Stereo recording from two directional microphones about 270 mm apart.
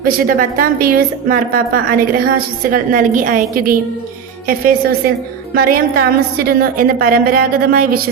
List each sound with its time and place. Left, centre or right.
0.0 s a woman's voice: right